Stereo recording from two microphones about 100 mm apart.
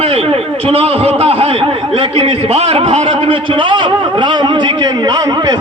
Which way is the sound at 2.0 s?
75° right (ahead or behind).